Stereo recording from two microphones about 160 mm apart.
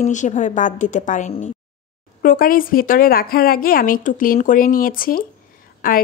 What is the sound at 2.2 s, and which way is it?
A woman's voice, 60° left (ahead or behind).